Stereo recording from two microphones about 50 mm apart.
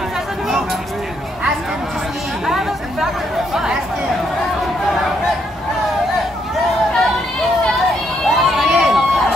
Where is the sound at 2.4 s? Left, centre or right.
Centre.